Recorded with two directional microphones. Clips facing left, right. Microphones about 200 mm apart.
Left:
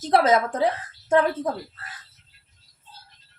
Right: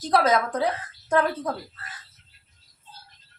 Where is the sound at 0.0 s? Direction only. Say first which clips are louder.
Left 2 dB; 25° left (ahead or behind).